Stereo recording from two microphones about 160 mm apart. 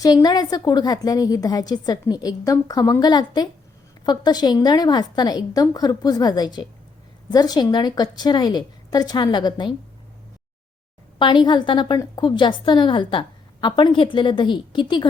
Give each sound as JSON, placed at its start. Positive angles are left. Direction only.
{"t": 0.0, "sound": "a woman's voice", "side_deg": 25}
{"t": 11.2, "sound": "a woman's voice", "side_deg": 30}